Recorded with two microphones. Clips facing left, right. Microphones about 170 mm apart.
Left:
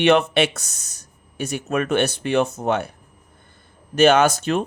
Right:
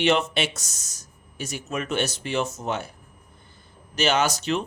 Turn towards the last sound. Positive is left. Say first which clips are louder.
# left 5 dB
turn(degrees=50)  # may be behind; listen again after turning